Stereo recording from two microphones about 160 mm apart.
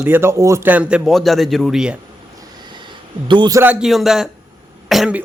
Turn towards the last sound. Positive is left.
turn(degrees=-5)  # may be behind; listen again after turning